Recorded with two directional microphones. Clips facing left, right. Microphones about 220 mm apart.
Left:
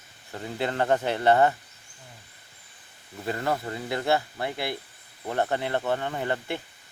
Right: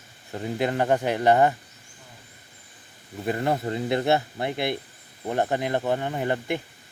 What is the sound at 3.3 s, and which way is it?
Speech, 20° right (ahead or behind).